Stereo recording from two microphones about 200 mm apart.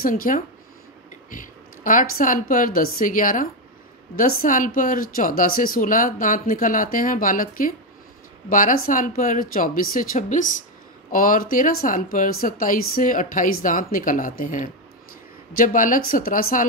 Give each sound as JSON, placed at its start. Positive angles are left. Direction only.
{"t": 0.0, "sound": "speech", "side_deg": 45}